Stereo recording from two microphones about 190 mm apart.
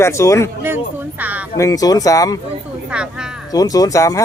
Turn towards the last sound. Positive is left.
turn(degrees=15)  # may be behind; listen again after turning